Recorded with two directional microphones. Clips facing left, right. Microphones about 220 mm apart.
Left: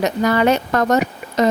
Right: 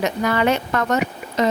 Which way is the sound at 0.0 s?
40° left (ahead or behind).